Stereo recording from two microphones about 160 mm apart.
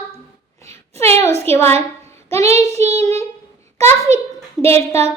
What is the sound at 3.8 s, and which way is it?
Speech, 15° left (ahead or behind).